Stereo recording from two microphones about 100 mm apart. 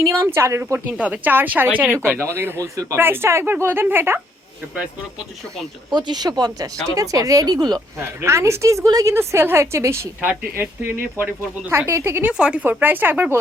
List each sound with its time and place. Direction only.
0.0 s speech: 25° right (ahead or behind)
0.9 s speech: 15° right (ahead or behind)
5.9 s speech: 45° right (ahead or behind)
7.9 s speech: 25° right (ahead or behind)
12.3 s speech: 10° right (ahead or behind)